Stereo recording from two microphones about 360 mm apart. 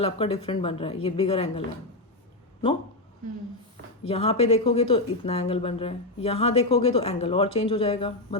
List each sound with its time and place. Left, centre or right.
0.0 s speech: centre
4.0 s speech: centre